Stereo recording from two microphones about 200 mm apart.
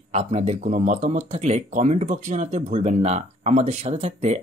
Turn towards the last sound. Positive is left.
turn(degrees=-35)  # may be behind; listen again after turning